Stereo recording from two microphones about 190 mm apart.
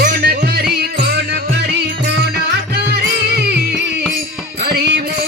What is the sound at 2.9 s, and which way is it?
Music, 60° right (ahead or behind).